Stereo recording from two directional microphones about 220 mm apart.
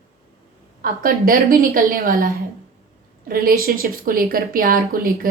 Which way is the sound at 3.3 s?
40° right (ahead or behind).